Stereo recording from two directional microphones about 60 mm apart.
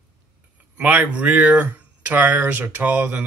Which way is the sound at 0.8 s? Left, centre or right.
Right.